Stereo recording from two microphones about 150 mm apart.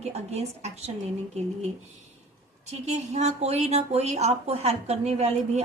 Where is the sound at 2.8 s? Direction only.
45° right (ahead or behind).